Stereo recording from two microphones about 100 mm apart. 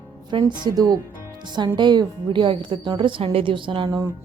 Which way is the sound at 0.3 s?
50° right (ahead or behind).